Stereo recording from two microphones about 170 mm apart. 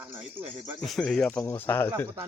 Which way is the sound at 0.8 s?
5° left (ahead or behind).